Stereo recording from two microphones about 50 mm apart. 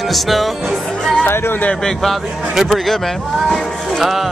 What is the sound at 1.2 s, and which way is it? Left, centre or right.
Speech, left.